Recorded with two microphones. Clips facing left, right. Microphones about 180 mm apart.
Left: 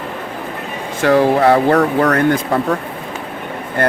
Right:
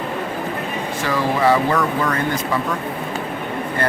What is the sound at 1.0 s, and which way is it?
Speech, 65° left (ahead or behind).